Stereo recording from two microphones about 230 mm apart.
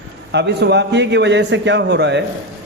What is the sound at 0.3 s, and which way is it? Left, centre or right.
A man's voice, right.